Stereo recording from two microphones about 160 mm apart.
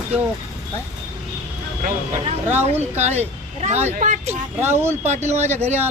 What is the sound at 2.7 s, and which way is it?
Speech, 45° right (ahead or behind).